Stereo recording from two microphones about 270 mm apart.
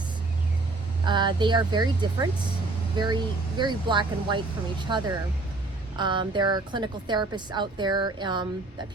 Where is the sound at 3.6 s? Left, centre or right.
Centre.